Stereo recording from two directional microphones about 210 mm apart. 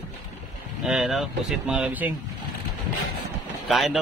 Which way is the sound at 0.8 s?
Centre (ahead or behind).